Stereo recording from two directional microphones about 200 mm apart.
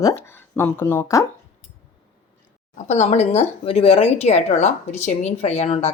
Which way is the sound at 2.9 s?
35° left (ahead or behind).